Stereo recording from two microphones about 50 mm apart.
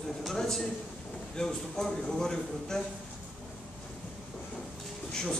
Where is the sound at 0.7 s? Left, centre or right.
Centre.